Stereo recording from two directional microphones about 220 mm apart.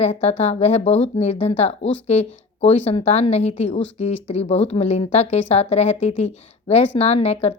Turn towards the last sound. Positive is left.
turn(degrees=30)  # may be behind; listen again after turning